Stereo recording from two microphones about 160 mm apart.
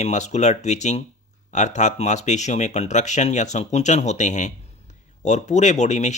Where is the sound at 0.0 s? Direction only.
45° left (ahead or behind).